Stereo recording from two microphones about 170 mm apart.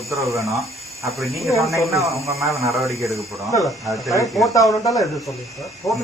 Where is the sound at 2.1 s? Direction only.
15° right (ahead or behind).